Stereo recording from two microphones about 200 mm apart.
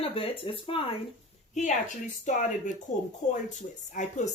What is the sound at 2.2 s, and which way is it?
Speech, 40° left (ahead or behind).